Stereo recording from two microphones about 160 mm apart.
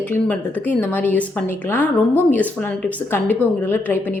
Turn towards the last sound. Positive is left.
turn(degrees=10)  # may be behind; listen again after turning